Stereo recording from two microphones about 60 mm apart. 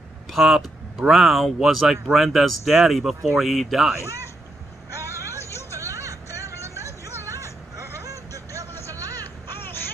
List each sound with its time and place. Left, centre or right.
0.3 s speech: centre